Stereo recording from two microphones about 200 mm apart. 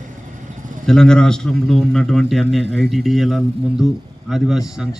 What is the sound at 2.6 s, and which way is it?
Speech, 60° right (ahead or behind).